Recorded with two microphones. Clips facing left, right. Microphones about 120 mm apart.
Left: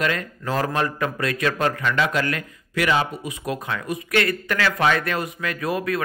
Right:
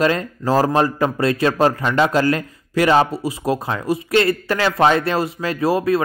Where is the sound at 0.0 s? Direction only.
30° right (ahead or behind).